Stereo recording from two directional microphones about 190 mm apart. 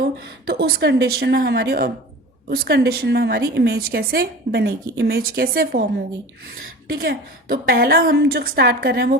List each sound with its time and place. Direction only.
0.0 s a woman's voice: 55° right (ahead or behind)
6.9 s a woman's voice: 55° right (ahead or behind)